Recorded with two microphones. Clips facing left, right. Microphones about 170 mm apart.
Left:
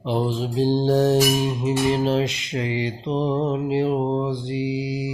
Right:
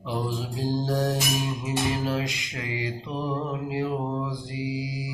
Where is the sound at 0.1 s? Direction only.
25° left (ahead or behind).